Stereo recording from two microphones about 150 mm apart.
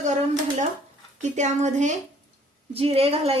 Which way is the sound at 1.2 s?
55° right (ahead or behind).